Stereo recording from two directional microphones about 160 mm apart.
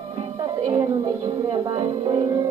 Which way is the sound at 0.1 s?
35° right (ahead or behind).